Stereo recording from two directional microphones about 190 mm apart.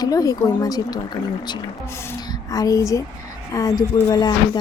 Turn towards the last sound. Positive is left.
turn(degrees=20)  # may be behind; listen again after turning